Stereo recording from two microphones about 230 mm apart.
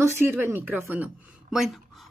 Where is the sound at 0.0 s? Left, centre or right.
Centre.